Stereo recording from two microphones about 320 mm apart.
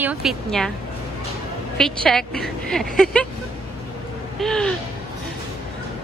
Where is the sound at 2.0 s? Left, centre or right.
Centre.